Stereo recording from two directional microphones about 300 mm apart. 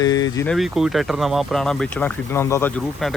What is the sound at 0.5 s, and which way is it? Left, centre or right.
Speech, centre.